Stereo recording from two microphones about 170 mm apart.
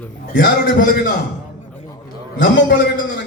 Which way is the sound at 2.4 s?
75° left (ahead or behind).